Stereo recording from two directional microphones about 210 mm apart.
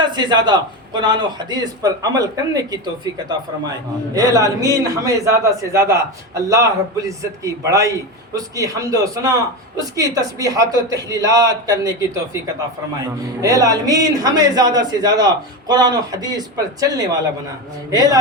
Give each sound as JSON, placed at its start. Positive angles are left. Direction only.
{"t": 0.0, "sound": "a man's voice", "side_deg": -20}
{"t": 4.1, "sound": "a man's voice", "side_deg": -15}
{"t": 13.4, "sound": "a man's voice", "side_deg": -15}